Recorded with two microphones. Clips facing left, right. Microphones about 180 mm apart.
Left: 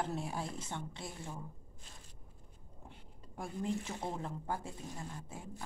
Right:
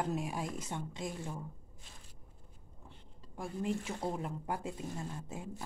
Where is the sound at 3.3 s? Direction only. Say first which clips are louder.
Right 1 dB; 5° right (ahead or behind).